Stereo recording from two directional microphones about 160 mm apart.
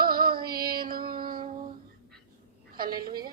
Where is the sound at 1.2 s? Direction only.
30° right (ahead or behind).